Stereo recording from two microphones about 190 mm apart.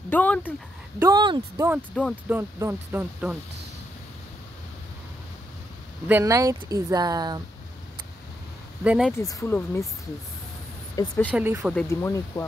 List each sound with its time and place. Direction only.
0.1 s speech: 10° left (ahead or behind)
0.9 s speech: 20° right (ahead or behind)
2.2 s speech: 10° right (ahead or behind)
6.0 s speech: 15° right (ahead or behind)
8.8 s speech: 5° right (ahead or behind)
9.2 s speech: 15° left (ahead or behind)
11.0 s speech: 10° left (ahead or behind)
11.3 s speech: 10° right (ahead or behind)
11.7 s speech: 15° left (ahead or behind)